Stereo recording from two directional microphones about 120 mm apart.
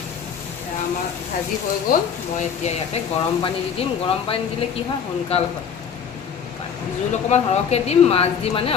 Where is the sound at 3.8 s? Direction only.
55° left (ahead or behind).